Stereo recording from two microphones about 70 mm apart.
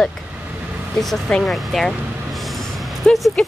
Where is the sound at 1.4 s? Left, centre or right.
Centre.